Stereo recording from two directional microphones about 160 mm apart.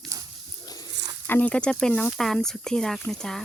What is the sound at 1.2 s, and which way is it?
Speech, 10° left (ahead or behind).